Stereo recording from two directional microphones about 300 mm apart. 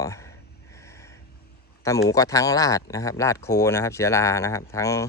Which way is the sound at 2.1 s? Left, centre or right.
Centre.